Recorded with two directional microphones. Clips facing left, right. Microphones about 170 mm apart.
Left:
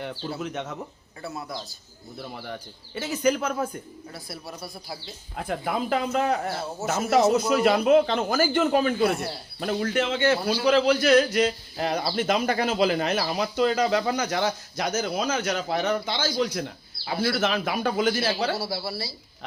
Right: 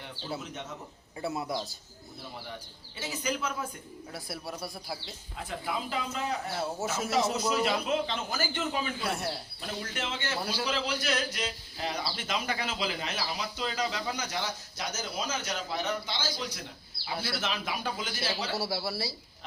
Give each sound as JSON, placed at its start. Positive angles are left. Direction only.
{"t": 0.4, "sound": "speech", "side_deg": 70}
{"t": 1.2, "sound": "a man's voice", "side_deg": -25}
{"t": 2.3, "sound": "speech", "side_deg": 60}
{"t": 4.1, "sound": "speech", "side_deg": -10}
{"t": 5.4, "sound": "a man's voice", "side_deg": 55}
{"t": 18.7, "sound": "speech", "side_deg": 5}